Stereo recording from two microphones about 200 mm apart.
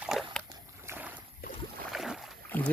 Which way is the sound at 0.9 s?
10° right (ahead or behind).